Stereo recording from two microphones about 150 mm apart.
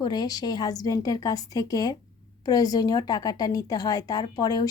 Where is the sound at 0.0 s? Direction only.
25° left (ahead or behind).